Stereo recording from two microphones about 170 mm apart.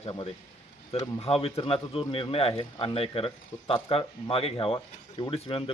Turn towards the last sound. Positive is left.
turn(degrees=30)  # may be behind; listen again after turning